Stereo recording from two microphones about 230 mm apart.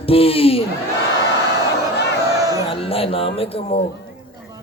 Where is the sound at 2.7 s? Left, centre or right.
Left.